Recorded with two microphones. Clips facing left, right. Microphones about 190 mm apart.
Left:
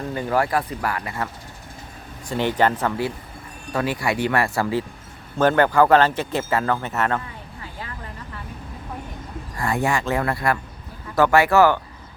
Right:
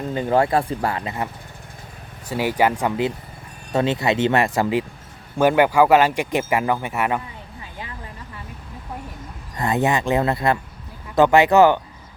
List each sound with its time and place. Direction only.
0.1 s speech: 20° right (ahead or behind)
2.3 s speech: 10° right (ahead or behind)
7.6 s vehicle: 20° right (ahead or behind)
9.6 s speech: 20° right (ahead or behind)